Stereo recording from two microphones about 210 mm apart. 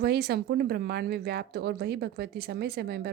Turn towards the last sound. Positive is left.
turn(degrees=-50)  # may be behind; listen again after turning